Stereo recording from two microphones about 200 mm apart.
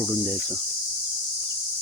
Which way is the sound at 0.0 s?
Centre (ahead or behind).